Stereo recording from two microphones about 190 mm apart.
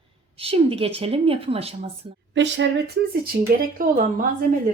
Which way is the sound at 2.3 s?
70° right (ahead or behind).